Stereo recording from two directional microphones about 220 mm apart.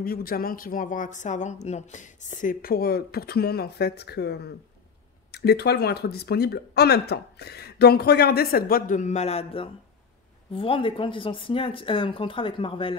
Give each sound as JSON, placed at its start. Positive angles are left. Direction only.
{"t": 0.0, "sound": "speech", "side_deg": 40}